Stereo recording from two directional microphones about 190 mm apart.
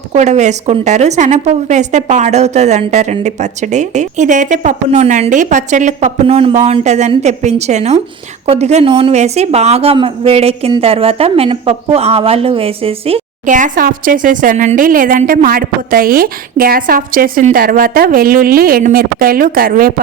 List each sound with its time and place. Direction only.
0.1 s speech: 35° right (ahead or behind)